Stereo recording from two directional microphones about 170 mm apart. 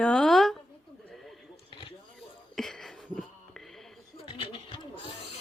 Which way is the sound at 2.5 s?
5° left (ahead or behind).